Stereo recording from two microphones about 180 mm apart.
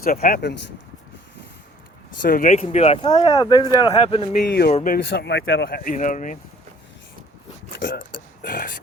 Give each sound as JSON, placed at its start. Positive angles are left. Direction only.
{"t": 0.0, "sound": "speech", "side_deg": 55}
{"t": 2.2, "sound": "speech", "side_deg": 50}
{"t": 4.3, "sound": "speech", "side_deg": 60}
{"t": 4.7, "sound": "speech", "side_deg": 45}
{"t": 5.0, "sound": "speech", "side_deg": 75}
{"t": 7.8, "sound": "a sound", "side_deg": 85}
{"t": 8.4, "sound": "a sound", "side_deg": 50}